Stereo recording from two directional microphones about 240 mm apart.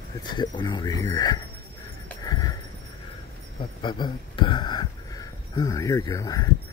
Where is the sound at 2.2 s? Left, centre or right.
Centre.